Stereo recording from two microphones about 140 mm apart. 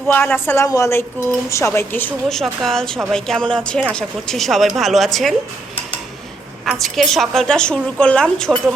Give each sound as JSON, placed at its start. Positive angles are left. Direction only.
{"t": 0.1, "sound": "a woman's voice", "side_deg": 10}
{"t": 2.3, "sound": "a woman's voice", "side_deg": 0}
{"t": 6.7, "sound": "a woman's voice", "side_deg": 0}